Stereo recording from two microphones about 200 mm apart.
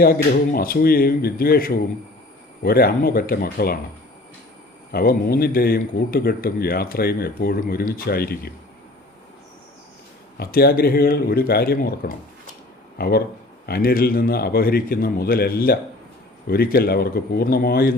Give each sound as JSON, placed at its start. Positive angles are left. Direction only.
{"t": 0.0, "sound": "speech", "side_deg": 45}
{"t": 4.9, "sound": "speech", "side_deg": 50}
{"t": 10.3, "sound": "speech", "side_deg": 50}